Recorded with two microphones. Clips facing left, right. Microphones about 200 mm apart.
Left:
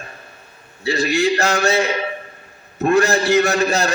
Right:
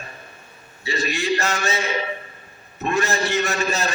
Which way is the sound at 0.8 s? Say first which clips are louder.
Left 6 dB; 80° left.